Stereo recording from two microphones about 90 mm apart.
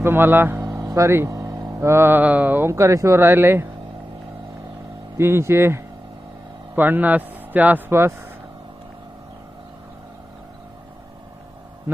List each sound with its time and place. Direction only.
0.0 s speech: 25° right (ahead or behind)
0.6 s vehicle: 40° right (ahead or behind)
1.9 s speech: 25° right (ahead or behind)
5.1 s speech: 30° right (ahead or behind)